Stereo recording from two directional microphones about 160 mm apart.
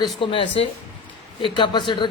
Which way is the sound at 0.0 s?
35° left (ahead or behind).